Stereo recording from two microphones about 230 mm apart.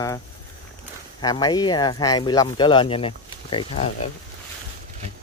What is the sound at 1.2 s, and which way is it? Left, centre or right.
Speech, centre.